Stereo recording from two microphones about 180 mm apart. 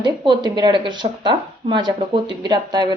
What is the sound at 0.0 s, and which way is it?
Speech, 25° right (ahead or behind).